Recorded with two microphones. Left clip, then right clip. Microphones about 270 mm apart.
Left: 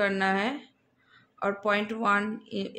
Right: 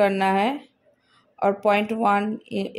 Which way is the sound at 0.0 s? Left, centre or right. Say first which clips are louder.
Right 6 dB; centre.